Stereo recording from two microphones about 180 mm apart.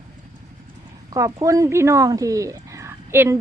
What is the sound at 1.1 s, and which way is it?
A woman's voice, 20° right (ahead or behind).